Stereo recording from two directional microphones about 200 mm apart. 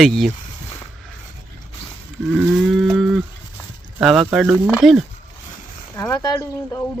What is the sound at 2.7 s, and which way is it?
Moo, centre (ahead or behind).